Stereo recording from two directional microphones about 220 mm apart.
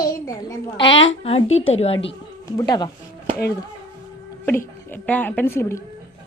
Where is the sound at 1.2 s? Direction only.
30° left (ahead or behind).